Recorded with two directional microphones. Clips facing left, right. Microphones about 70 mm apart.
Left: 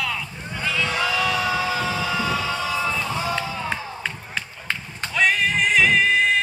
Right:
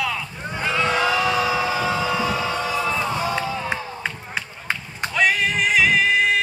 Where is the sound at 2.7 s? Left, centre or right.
Centre.